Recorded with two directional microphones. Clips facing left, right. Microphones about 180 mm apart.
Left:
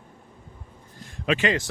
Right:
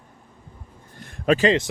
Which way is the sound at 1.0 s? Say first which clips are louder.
Right 6 dB; 55° right (ahead or behind).